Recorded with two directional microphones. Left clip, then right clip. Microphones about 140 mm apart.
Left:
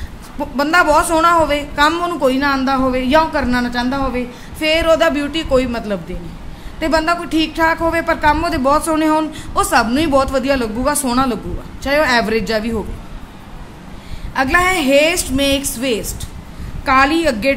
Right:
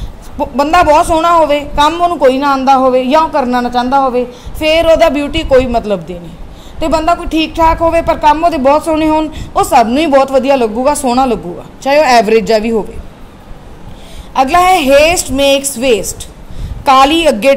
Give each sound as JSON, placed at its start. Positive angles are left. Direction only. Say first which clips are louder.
{"t": 0.4, "sound": "a woman's voice", "louder": "right 5 dB", "side_deg": -30}
{"t": 14.3, "sound": "a woman's voice", "louder": "right 7 dB", "side_deg": -40}